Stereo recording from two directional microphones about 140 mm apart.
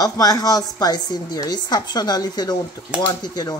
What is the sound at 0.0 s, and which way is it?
A woman's voice, 25° left (ahead or behind).